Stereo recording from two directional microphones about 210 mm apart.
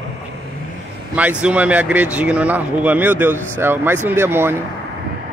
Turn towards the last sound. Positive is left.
turn(degrees=-10)  # may be behind; listen again after turning